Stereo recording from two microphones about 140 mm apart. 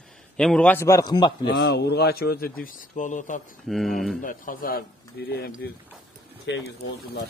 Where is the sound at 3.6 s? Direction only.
Centre (ahead or behind).